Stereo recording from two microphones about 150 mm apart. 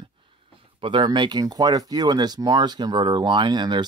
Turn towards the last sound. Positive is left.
turn(degrees=-30)  # may be behind; listen again after turning